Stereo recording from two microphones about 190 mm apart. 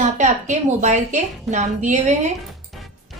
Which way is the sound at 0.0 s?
40° right (ahead or behind).